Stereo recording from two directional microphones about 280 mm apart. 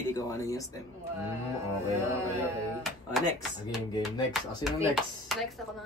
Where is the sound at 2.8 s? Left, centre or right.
Centre.